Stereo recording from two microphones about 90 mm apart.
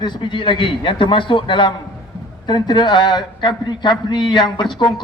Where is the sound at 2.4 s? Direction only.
55° left (ahead or behind).